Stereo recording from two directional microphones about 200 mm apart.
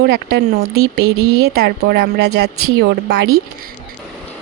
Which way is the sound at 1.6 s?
50° right (ahead or behind).